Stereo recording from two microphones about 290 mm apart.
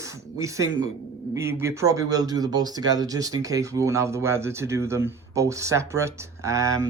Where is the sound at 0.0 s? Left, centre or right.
Centre.